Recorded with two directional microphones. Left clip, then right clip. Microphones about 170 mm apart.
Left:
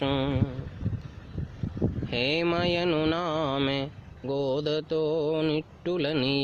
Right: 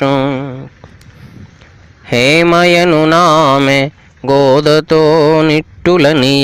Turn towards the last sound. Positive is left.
turn(degrees=-45)  # may be behind; listen again after turning